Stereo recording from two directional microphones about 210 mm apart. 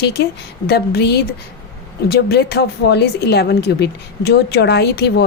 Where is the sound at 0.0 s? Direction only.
50° left (ahead or behind).